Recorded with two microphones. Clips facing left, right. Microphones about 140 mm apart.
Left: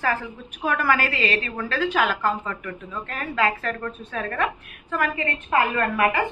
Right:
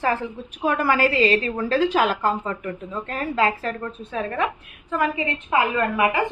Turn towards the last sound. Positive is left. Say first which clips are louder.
# right 1 dB
turn(degrees=-15)  # may be behind; listen again after turning